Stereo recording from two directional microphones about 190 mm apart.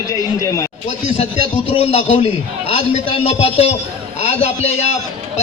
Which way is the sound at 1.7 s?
35° left (ahead or behind).